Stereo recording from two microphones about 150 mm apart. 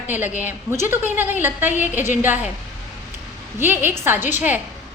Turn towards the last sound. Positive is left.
turn(degrees=-10)  # may be behind; listen again after turning